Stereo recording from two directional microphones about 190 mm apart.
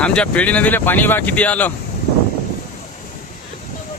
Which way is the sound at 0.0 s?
5° left (ahead or behind).